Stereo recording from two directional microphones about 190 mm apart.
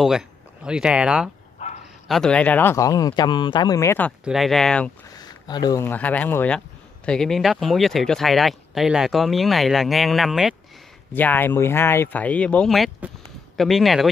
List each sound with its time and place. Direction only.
0.7 s speech: 5° right (ahead or behind)
1.6 s bow-wow: 35° left (ahead or behind)
2.0 s speech: centre (ahead or behind)
4.2 s speech: centre (ahead or behind)
5.1 s speech: 20° left (ahead or behind); by 10.5 s centre (ahead or behind)
11.1 s speech: 10° left (ahead or behind)